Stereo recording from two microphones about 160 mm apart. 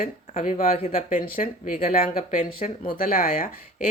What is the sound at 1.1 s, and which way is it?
Speech, 60° left (ahead or behind).